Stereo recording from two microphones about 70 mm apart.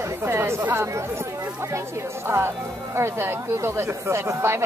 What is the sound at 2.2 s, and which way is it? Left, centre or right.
Speech, right.